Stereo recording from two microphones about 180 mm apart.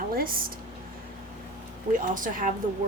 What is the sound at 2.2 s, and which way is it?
Speech, 50° right (ahead or behind).